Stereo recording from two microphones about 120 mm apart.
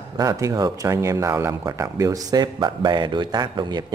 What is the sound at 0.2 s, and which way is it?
Speech, 30° right (ahead or behind).